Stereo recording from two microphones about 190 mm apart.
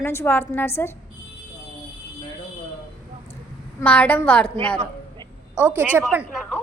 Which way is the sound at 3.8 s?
10° left (ahead or behind).